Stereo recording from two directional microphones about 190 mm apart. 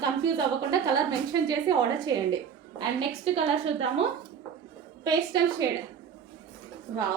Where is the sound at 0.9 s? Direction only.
20° right (ahead or behind).